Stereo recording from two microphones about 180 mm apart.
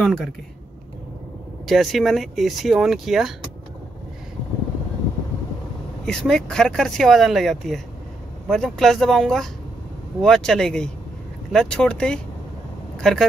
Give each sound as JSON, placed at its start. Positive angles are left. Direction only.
{"t": 0.0, "sound": "a man's voice", "side_deg": 0}
{"t": 1.7, "sound": "speech", "side_deg": 0}
{"t": 6.0, "sound": "speech", "side_deg": 5}